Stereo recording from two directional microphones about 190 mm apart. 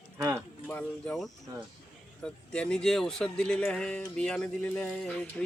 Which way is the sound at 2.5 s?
5° left (ahead or behind).